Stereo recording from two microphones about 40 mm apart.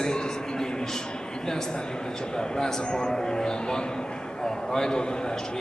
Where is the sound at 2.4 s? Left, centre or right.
Centre.